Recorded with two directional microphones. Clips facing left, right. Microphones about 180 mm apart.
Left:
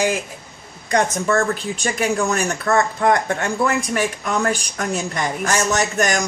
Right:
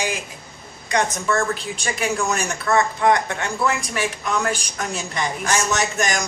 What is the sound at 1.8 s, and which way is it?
Speech, 45° left (ahead or behind).